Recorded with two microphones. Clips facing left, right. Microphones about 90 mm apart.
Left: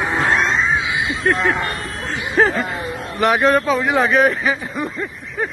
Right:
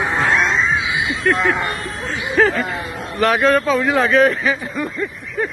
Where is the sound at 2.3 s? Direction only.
25° left (ahead or behind).